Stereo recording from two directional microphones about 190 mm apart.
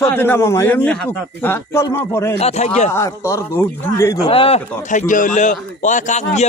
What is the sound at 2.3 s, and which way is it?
Speech, 35° left (ahead or behind).